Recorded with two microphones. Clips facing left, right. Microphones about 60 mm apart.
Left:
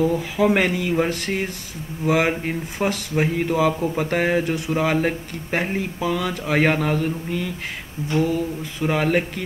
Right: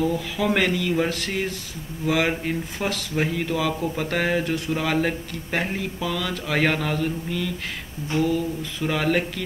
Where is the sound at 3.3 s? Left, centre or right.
Left.